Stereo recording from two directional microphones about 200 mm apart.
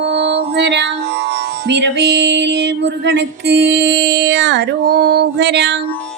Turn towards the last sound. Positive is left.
turn(degrees=-60)  # may be behind; listen again after turning